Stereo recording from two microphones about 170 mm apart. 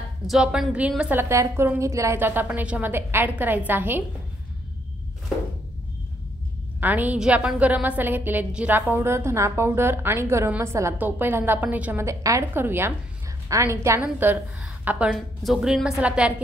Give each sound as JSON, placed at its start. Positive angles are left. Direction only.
{"t": 0.3, "sound": "a woman's voice", "side_deg": -5}
{"t": 6.8, "sound": "a woman's voice", "side_deg": -10}